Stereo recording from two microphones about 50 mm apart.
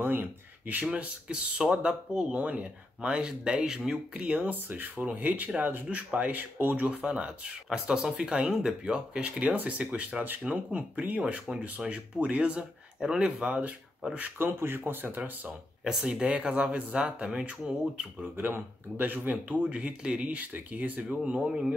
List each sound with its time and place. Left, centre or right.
0.0 s speech: right
0.9 s speech: right
4.4 s speech: right
7.8 s speech: centre
13.5 s speech: right
15.8 s speech: centre
16.3 s speech: right
18.3 s speech: right
19.4 s speech: right
20.2 s speech: right
21.4 s speech: centre